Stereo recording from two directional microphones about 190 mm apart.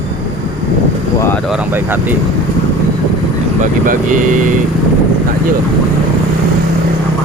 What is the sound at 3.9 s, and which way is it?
Speech, 40° right (ahead or behind).